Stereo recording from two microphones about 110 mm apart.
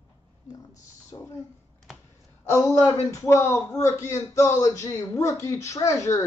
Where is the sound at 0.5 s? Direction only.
30° left (ahead or behind).